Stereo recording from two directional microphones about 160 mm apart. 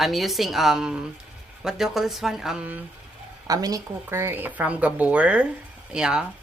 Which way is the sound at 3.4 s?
25° right (ahead or behind).